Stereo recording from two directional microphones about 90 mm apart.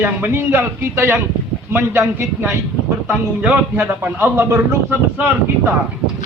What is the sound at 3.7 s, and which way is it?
Speech, 25° right (ahead or behind).